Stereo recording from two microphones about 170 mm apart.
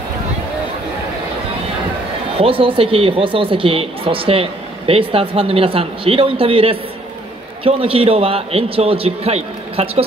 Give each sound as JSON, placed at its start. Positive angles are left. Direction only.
{"t": 2.3, "sound": "a woman's voice", "side_deg": -35}